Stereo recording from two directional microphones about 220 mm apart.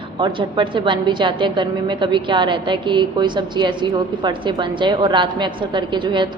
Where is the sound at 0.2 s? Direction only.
20° right (ahead or behind).